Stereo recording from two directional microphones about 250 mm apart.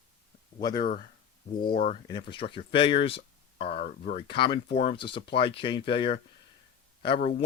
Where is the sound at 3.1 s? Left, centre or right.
Left.